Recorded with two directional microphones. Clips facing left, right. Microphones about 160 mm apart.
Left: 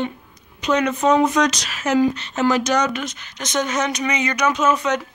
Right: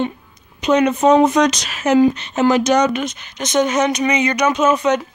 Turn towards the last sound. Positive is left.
turn(degrees=-20)  # may be behind; listen again after turning